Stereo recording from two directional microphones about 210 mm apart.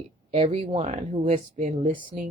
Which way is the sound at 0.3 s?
30° right (ahead or behind).